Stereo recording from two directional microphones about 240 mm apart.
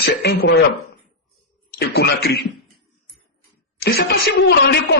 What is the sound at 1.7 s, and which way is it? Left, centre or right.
Speech, left.